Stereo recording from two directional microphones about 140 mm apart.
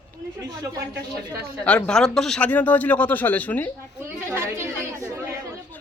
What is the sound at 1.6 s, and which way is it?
Speech, 10° left (ahead or behind).